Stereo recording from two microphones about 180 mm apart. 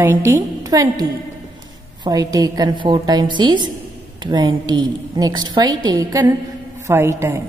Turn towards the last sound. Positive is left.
turn(degrees=-15)  # may be behind; listen again after turning